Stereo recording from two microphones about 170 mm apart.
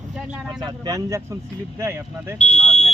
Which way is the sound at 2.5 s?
5° left (ahead or behind).